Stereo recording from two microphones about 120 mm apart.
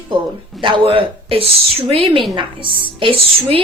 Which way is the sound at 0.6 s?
50° right (ahead or behind).